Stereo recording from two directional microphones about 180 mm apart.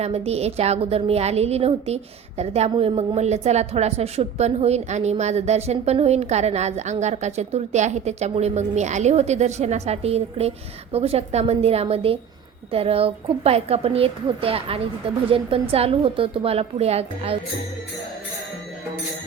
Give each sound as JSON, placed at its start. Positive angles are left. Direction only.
{"t": 0.0, "sound": "a woman's voice", "side_deg": -35}